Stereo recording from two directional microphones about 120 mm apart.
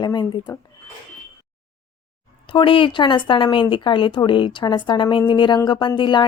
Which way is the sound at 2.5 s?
45° left (ahead or behind).